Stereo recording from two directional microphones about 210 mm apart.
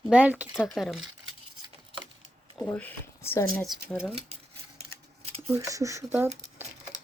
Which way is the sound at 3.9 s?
5° right (ahead or behind).